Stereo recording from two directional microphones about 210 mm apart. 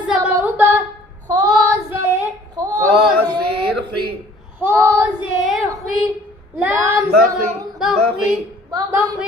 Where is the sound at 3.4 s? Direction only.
50° right (ahead or behind).